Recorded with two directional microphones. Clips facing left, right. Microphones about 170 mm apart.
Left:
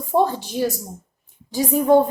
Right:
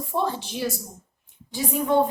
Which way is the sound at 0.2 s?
45° left (ahead or behind).